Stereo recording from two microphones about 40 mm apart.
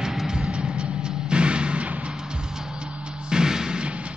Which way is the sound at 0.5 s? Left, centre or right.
Right.